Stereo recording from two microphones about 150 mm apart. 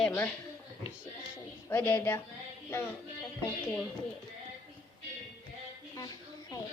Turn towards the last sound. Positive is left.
turn(degrees=25)  # may be behind; listen again after turning